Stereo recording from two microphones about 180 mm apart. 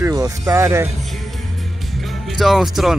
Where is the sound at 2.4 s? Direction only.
Centre (ahead or behind).